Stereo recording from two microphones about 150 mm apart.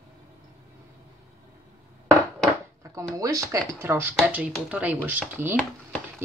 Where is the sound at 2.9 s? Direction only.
20° right (ahead or behind).